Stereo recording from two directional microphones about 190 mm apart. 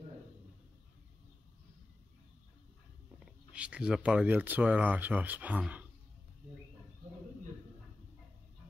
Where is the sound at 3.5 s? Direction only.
5° right (ahead or behind).